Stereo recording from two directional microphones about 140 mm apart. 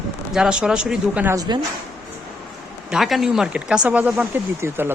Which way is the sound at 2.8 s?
Centre (ahead or behind).